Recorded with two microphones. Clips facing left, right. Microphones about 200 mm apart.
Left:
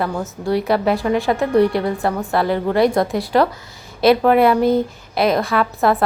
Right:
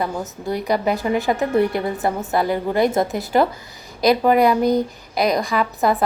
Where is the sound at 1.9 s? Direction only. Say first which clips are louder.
Left 1 dB; 20° right (ahead or behind).